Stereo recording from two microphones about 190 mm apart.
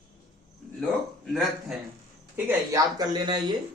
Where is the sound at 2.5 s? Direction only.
20° right (ahead or behind).